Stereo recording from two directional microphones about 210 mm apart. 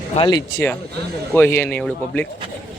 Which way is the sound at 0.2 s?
20° left (ahead or behind).